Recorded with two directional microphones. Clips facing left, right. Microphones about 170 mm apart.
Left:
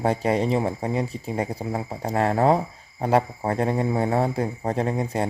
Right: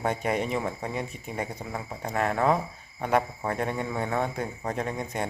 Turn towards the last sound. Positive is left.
turn(degrees=30)  # may be behind; listen again after turning